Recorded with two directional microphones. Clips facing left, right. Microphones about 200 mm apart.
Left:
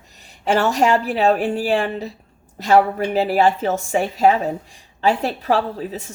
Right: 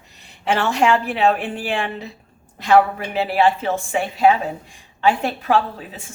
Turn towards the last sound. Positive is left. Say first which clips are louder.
# left 6 dB
turn(degrees=40)  # may be behind; listen again after turning